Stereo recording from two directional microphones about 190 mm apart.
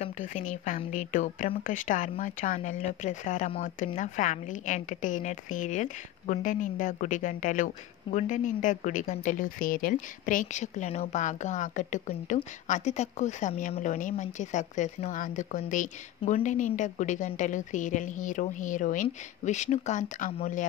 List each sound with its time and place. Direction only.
0.0 s a woman's voice: 40° left (ahead or behind)